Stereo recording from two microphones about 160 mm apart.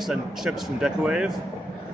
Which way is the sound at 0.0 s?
5° right (ahead or behind).